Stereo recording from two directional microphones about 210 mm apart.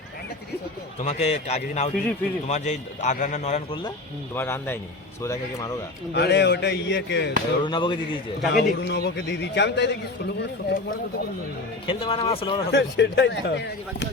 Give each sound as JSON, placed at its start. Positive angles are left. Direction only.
{"t": 1.0, "sound": "a man's voice", "side_deg": 30}
{"t": 4.4, "sound": "speech", "side_deg": 10}
{"t": 6.1, "sound": "a man's voice", "side_deg": 50}
{"t": 7.6, "sound": "speech", "side_deg": 20}
{"t": 8.5, "sound": "a man's voice", "side_deg": 50}
{"t": 11.9, "sound": "speech", "side_deg": 25}
{"t": 12.7, "sound": "speech", "side_deg": 55}